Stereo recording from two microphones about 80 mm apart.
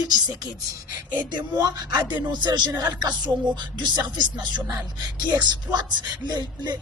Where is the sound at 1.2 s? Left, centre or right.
Right.